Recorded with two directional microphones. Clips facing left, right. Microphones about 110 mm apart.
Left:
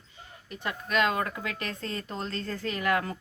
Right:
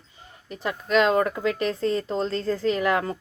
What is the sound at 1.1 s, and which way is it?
Speech, 20° right (ahead or behind).